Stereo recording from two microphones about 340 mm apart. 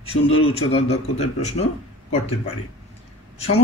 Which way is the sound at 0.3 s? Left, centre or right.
Left.